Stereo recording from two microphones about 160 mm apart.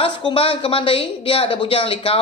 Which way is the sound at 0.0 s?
35° left (ahead or behind).